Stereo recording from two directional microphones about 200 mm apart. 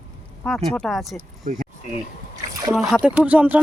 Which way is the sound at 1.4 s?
40° right (ahead or behind).